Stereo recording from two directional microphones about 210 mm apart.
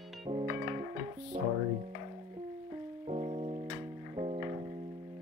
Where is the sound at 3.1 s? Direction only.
30° right (ahead or behind).